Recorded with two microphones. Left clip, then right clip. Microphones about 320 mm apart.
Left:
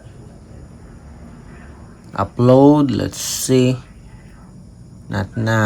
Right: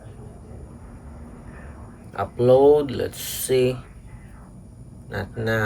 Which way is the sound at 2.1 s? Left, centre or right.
Centre.